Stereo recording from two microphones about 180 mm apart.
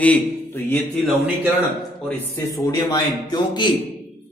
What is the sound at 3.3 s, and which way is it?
Speech, 25° left (ahead or behind).